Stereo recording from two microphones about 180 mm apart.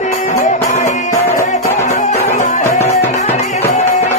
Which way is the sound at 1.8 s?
40° left (ahead or behind).